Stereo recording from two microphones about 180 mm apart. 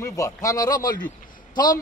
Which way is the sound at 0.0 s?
20° left (ahead or behind).